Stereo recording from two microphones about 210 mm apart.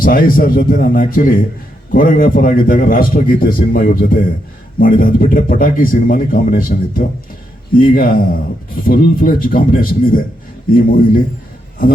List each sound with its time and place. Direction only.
0.0 s speech: 40° left (ahead or behind)